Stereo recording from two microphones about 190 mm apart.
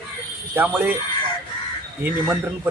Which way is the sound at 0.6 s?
10° right (ahead or behind).